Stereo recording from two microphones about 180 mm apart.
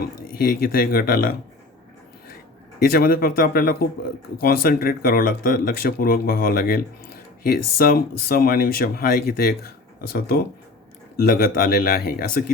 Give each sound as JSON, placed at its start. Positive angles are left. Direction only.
{"t": 0.0, "sound": "speech", "side_deg": 55}
{"t": 2.7, "sound": "speech", "side_deg": 55}